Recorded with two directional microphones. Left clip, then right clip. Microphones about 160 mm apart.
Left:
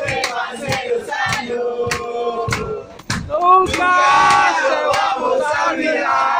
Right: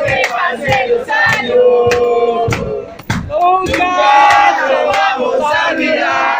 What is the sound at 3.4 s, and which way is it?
Battle cry, 35° left (ahead or behind).